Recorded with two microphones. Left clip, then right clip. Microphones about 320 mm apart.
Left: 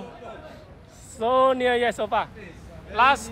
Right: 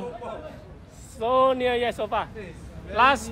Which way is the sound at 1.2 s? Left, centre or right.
Left.